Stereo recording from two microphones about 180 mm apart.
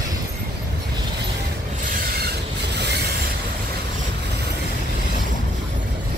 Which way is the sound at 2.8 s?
70° right (ahead or behind).